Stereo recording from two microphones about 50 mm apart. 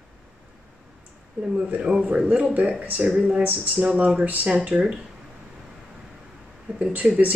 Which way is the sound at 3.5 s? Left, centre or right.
Right.